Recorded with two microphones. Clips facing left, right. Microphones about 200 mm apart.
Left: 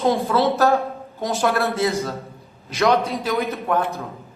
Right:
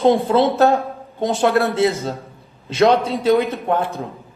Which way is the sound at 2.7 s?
30° right (ahead or behind).